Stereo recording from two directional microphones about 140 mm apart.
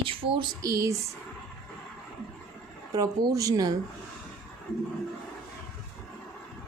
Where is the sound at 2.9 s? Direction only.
25° right (ahead or behind).